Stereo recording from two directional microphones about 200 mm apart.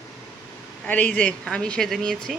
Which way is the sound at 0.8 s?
5° left (ahead or behind).